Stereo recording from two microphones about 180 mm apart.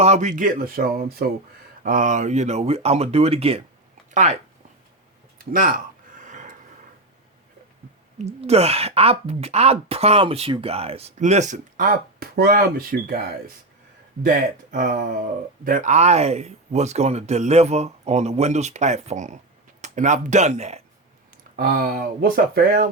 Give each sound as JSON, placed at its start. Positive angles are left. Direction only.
{"t": 0.0, "sound": "speech", "side_deg": -40}
{"t": 5.4, "sound": "a sound", "side_deg": -50}
{"t": 8.2, "sound": "speech", "side_deg": -35}
{"t": 14.2, "sound": "speech", "side_deg": -50}
{"t": 21.5, "sound": "speech", "side_deg": -55}